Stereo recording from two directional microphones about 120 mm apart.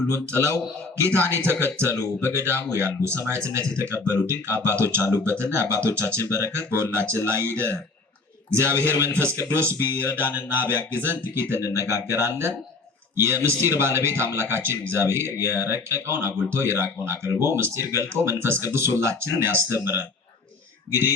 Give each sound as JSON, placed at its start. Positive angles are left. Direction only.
{"t": 0.3, "sound": "speech", "side_deg": -20}
{"t": 8.6, "sound": "speech", "side_deg": -20}